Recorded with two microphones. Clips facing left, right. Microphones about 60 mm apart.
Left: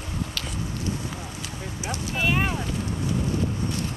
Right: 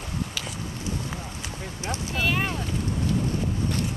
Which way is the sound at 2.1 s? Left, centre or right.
Centre.